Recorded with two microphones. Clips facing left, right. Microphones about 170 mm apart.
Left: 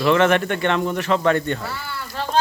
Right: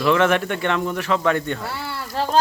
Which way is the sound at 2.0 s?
35° right (ahead or behind).